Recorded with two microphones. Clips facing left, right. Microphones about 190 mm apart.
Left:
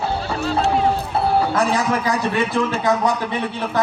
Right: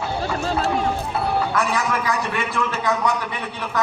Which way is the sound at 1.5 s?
35° left (ahead or behind).